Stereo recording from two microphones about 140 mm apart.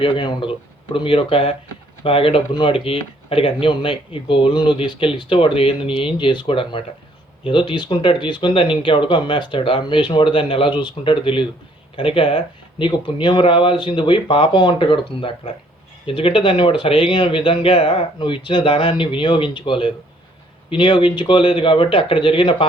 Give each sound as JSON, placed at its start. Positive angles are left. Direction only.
{"t": 0.0, "sound": "speech", "side_deg": 35}